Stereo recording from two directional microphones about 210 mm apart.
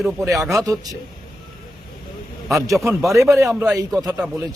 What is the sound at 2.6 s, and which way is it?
A man's voice, 15° right (ahead or behind).